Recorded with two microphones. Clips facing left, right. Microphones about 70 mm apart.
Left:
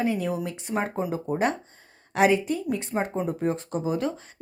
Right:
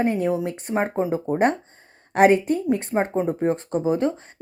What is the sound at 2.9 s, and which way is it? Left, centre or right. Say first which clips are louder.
Speech: right 5 dB; right.